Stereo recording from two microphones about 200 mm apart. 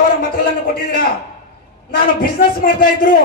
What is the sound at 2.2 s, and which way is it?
Speech, 45° left (ahead or behind).